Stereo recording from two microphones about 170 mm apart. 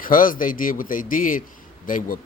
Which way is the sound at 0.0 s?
55° left (ahead or behind).